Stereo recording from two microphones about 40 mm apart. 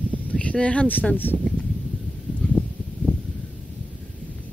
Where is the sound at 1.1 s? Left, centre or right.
Left.